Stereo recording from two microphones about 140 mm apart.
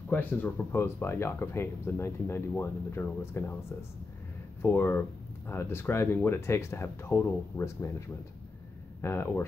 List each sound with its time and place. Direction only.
0.1 s speech: 10° left (ahead or behind)
4.6 s speech: 15° left (ahead or behind)
9.0 s speech: 20° left (ahead or behind)